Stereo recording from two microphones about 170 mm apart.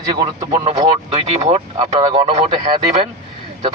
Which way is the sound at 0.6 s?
40° right (ahead or behind).